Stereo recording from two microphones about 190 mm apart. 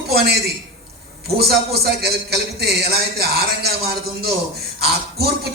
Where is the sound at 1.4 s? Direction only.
55° right (ahead or behind).